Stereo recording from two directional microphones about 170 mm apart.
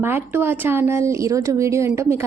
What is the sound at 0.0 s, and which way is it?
A woman's voice, 10° right (ahead or behind).